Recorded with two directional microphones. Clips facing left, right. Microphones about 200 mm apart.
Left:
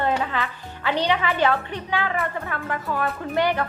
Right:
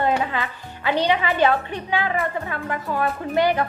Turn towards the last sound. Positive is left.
turn(degrees=-15)  # may be behind; listen again after turning